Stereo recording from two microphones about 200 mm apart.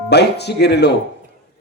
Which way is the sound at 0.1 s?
55° left (ahead or behind).